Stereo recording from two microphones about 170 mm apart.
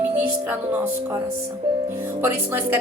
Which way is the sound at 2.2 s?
10° right (ahead or behind).